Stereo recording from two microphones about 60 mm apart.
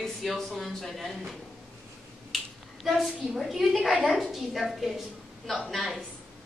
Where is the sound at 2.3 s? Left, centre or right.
Centre.